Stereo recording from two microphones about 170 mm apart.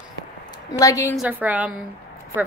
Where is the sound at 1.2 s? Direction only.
10° right (ahead or behind).